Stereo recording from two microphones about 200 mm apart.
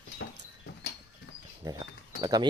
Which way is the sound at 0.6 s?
60° left (ahead or behind).